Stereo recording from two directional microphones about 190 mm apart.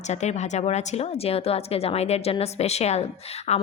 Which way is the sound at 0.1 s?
35° left (ahead or behind).